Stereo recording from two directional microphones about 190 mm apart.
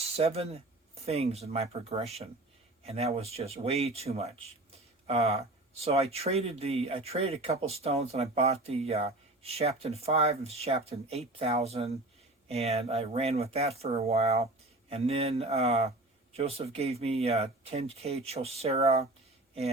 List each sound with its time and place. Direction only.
0.2 s speech: 35° right (ahead or behind)